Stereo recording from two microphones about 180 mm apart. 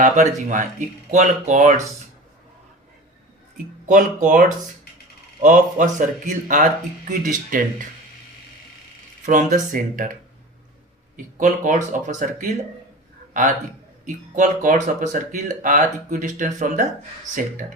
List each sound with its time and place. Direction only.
0.0 s speech: 45° right (ahead or behind)
3.8 s speech: 45° right (ahead or behind)
9.2 s speech: 45° right (ahead or behind)
11.3 s speech: 45° right (ahead or behind)
14.0 s speech: 45° right (ahead or behind)